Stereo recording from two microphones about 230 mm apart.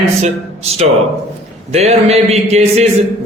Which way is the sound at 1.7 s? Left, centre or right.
Right.